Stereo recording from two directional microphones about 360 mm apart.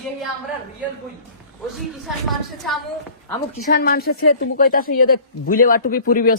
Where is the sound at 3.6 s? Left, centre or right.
Left.